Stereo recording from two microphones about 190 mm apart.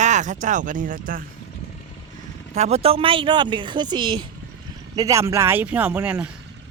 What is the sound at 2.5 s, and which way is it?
Speech, 35° right (ahead or behind).